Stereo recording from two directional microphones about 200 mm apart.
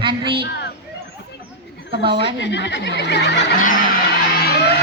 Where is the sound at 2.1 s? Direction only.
60° left (ahead or behind).